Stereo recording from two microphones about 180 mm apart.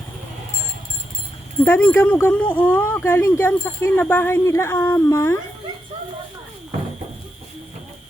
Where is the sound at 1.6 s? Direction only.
10° left (ahead or behind).